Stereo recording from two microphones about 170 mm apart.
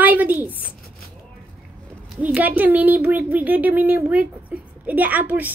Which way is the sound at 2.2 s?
10° right (ahead or behind).